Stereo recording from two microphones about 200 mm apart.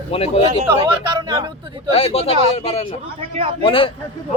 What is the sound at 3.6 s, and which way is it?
Speech, 25° left (ahead or behind).